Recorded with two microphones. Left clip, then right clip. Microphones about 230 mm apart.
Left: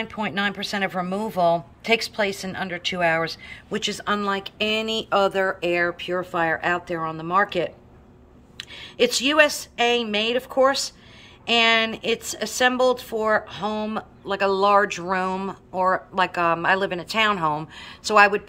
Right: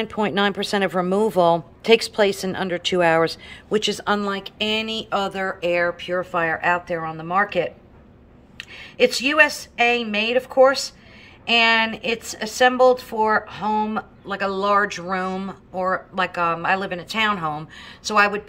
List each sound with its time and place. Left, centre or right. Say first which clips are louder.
0.0 s a woman's voice: right 4 dB; centre